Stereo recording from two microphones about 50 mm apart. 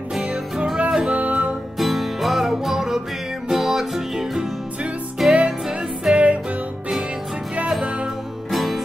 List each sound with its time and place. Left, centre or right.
0.2 s music: right
0.8 s music: centre
1.1 s music: right
1.8 s music: centre
7.8 s music: right
8.5 s music: centre